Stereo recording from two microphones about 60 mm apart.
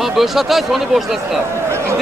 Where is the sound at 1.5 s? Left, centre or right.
Right.